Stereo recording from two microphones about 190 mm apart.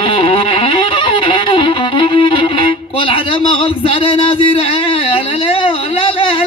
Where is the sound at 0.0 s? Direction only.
30° left (ahead or behind).